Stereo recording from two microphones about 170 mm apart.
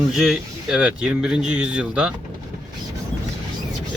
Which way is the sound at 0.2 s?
5° right (ahead or behind).